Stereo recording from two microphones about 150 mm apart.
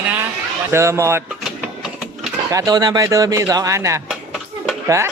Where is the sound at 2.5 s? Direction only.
25° right (ahead or behind).